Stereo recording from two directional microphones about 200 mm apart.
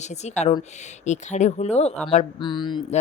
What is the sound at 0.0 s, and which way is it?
Speech, 35° left (ahead or behind).